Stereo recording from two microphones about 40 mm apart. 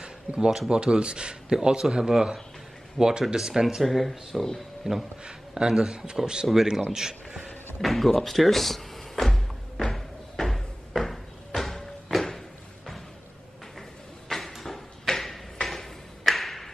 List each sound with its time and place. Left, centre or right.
0.4 s speech: centre
0.7 s speech: right
3.6 s speech: centre
5.2 s speech: right
6.4 s speech: centre
7.2 s a sound: centre
9.9 s cupboard open or close: centre
14.3 s a sound: centre